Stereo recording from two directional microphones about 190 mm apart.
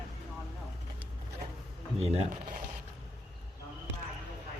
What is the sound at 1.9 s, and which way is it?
Speech, 30° right (ahead or behind).